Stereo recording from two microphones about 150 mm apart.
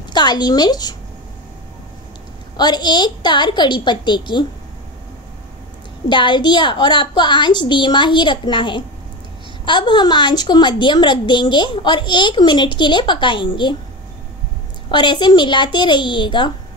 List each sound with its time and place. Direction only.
0.1 s a woman's voice: 30° left (ahead or behind)
2.5 s a woman's voice: 30° left (ahead or behind)
6.0 s a woman's voice: 30° left (ahead or behind)
14.9 s a woman's voice: 30° left (ahead or behind)